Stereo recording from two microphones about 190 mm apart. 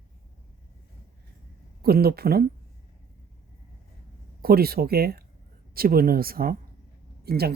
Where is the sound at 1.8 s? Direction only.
55° right (ahead or behind).